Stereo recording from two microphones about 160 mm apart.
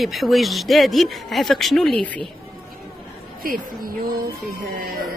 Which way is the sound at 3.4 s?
65° right (ahead or behind).